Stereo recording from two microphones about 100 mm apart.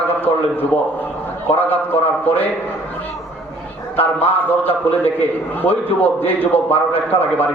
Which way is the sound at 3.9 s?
20° left (ahead or behind).